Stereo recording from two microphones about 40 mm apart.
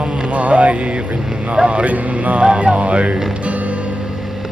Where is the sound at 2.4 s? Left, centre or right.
Right.